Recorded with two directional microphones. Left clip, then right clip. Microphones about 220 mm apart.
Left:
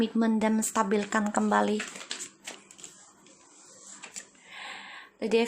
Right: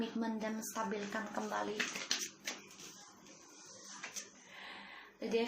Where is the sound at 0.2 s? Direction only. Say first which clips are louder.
Left 13 dB; 55° left (ahead or behind).